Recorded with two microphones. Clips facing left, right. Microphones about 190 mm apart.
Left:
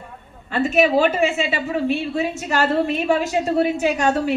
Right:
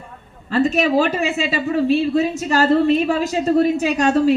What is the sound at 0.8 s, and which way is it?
Speech, 35° right (ahead or behind).